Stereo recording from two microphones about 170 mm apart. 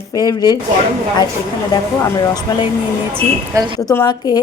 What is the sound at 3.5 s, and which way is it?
Speech, 20° right (ahead or behind).